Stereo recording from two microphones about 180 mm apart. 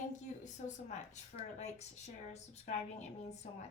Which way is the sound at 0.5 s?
40° left (ahead or behind).